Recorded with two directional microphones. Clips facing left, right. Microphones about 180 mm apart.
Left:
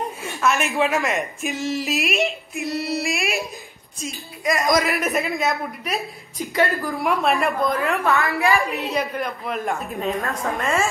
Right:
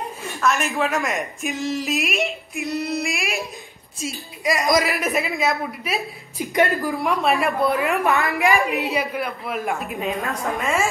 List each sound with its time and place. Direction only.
0.4 s a woman's voice: 5° left (ahead or behind)
6.5 s a woman's voice: 15° right (ahead or behind)
7.0 s a woman's voice: centre (ahead or behind)
7.8 s a woman's voice: 15° right (ahead or behind)
9.1 s a woman's voice: 5° right (ahead or behind)